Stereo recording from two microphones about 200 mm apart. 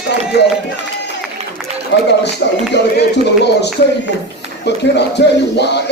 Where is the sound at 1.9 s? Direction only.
60° left (ahead or behind).